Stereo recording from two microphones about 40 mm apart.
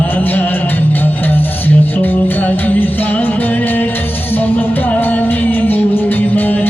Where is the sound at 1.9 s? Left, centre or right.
Left.